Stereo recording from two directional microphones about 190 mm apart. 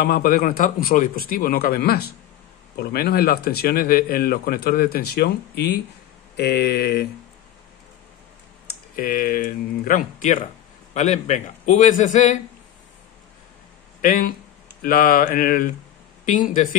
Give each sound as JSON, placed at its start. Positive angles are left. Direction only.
{"t": 0.0, "sound": "speech", "side_deg": 50}
{"t": 6.3, "sound": "mantra", "side_deg": 60}
{"t": 8.9, "sound": "a man's voice", "side_deg": 50}
{"t": 14.0, "sound": "speech", "side_deg": 50}